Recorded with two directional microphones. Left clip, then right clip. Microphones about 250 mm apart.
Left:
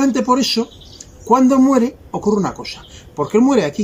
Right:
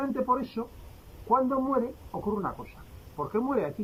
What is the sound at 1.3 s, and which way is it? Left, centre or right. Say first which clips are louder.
Speech: left 13 dB; left.